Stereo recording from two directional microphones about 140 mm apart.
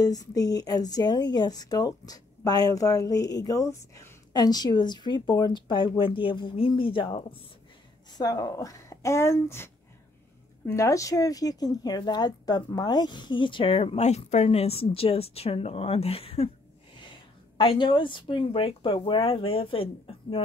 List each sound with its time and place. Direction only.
0.0 s speech: 25° left (ahead or behind)
8.2 s speech: 25° left (ahead or behind)
10.7 s a woman's voice: 20° left (ahead or behind); by 16.4 s 45° left (ahead or behind)
17.6 s speech: 35° left (ahead or behind)